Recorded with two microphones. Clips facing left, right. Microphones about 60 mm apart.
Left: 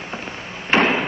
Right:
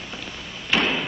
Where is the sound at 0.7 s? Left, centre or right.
Left.